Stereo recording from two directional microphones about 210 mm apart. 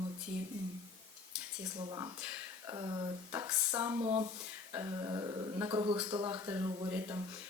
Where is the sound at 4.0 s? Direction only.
25° right (ahead or behind).